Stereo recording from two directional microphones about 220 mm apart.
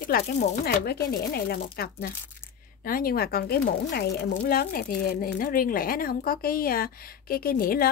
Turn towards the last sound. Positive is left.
turn(degrees=40)  # may be behind; listen again after turning